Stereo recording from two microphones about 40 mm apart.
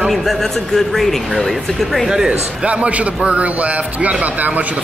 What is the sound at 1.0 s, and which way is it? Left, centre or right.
Speech, centre.